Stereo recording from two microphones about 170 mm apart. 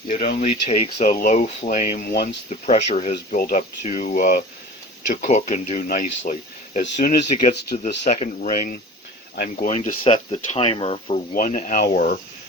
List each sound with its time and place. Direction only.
0.3 s speech: 40° left (ahead or behind); by 2.3 s 55° left (ahead or behind)
2.5 s speech: 40° left (ahead or behind)
3.4 s speech: 55° left (ahead or behind)
9.3 s speech: 60° left (ahead or behind)
9.6 s speech: 40° left (ahead or behind)
11.3 s speech: 50° left (ahead or behind)